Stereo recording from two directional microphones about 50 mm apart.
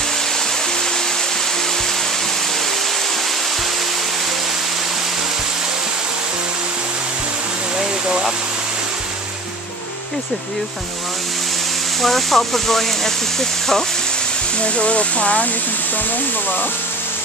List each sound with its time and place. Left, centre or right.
12.0 s speech: centre
14.8 s speech: left